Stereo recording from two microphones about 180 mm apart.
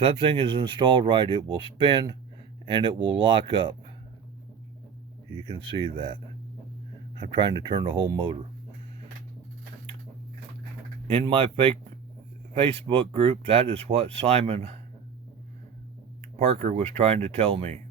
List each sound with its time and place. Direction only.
0.0 s speech: 30° right (ahead or behind)
5.3 s speech: 25° right (ahead or behind)
7.2 s speech: 25° right (ahead or behind)
11.1 s speech: 30° right (ahead or behind)
16.4 s speech: 35° right (ahead or behind)